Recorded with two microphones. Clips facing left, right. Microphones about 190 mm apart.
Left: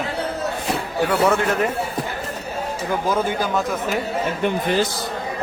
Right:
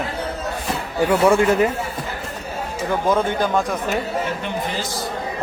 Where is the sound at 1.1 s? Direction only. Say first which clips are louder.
Right 4 dB; 10° right (ahead or behind).